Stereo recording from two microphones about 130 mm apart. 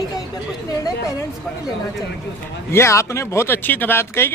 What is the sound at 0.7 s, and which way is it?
Speech, 25° left (ahead or behind).